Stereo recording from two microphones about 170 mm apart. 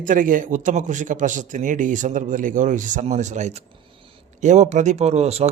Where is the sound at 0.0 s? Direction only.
50° right (ahead or behind).